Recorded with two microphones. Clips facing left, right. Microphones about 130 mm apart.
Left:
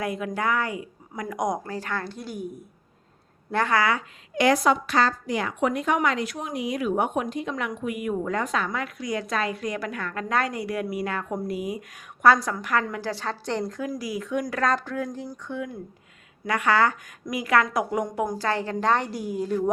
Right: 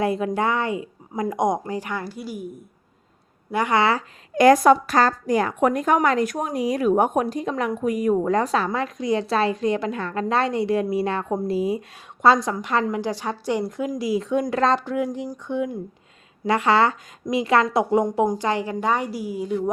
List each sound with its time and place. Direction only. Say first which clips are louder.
0.0 s a woman's voice: right 5 dB; 30° right (ahead or behind); by 2.5 s 5° right (ahead or behind)
3.5 s speech: right 2 dB; 15° right (ahead or behind)
3.8 s a woman's voice: right 5 dB; 30° right (ahead or behind)
4.4 s a woman's voice: right 7 dB; 45° right (ahead or behind); by 19.5 s 5° right (ahead or behind)